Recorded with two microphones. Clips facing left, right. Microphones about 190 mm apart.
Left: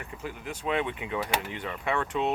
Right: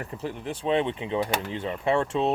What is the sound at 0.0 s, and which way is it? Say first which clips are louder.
Speech: right 5 dB; 35° right (ahead or behind).